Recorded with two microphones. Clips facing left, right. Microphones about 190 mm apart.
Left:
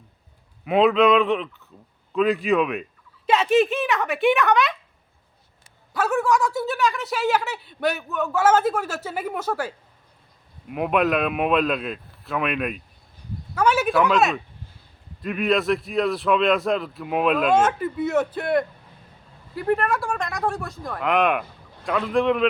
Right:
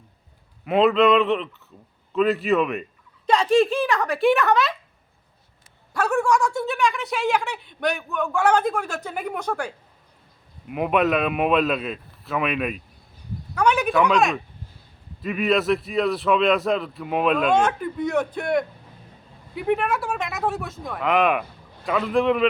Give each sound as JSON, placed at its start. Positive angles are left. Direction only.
{"t": 0.6, "sound": "speech", "side_deg": 0}
{"t": 5.9, "sound": "speech", "side_deg": 0}